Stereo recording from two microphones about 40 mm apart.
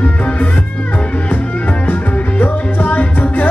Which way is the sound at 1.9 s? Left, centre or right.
Left.